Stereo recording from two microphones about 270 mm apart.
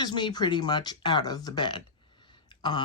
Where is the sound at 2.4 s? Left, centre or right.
Centre.